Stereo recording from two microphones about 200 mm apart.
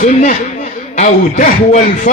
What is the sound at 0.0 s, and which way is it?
Music, 35° left (ahead or behind).